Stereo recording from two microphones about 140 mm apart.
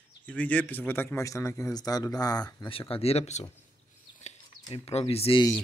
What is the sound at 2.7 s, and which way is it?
Speech, 40° left (ahead or behind).